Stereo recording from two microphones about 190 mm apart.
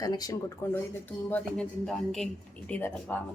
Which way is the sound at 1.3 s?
5° left (ahead or behind).